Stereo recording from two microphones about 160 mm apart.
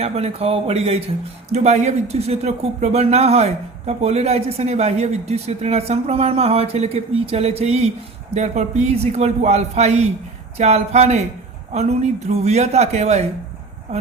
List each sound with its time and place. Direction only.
0.0 s a man's voice: 40° right (ahead or behind)